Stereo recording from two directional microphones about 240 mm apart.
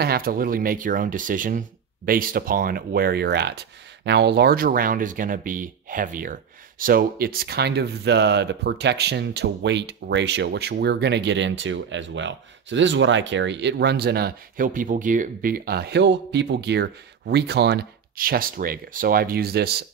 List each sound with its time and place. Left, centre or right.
0.0 s speech: right